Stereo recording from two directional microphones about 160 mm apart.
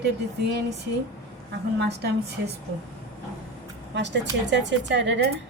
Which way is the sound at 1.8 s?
90° right.